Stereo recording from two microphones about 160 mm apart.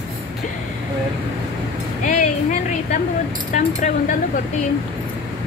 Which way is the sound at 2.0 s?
50° left (ahead or behind).